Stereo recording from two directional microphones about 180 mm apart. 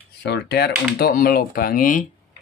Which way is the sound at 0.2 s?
70° left (ahead or behind).